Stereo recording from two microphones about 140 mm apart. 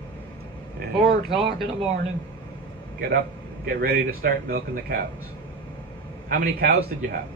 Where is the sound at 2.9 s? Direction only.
90° right.